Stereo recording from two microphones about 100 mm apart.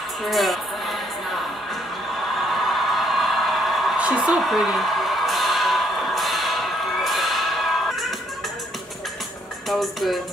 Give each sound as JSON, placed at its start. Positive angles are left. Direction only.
{"t": 0.2, "sound": "speech", "side_deg": 0}
{"t": 2.5, "sound": "a sound", "side_deg": 0}
{"t": 9.7, "sound": "speech", "side_deg": 0}